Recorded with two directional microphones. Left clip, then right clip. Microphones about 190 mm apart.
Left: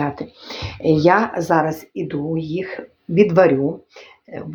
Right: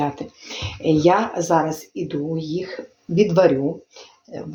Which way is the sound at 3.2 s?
25° left (ahead or behind).